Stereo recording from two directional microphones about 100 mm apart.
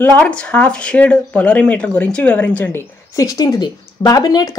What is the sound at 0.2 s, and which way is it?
Speech, 10° left (ahead or behind).